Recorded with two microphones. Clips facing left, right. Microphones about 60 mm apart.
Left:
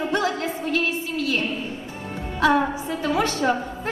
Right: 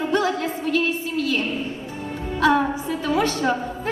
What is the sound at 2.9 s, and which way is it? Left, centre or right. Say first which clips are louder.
Speech: right 1 dB; left.